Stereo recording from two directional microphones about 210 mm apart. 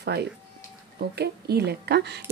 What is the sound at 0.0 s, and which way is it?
A woman's voice, 50° right (ahead or behind).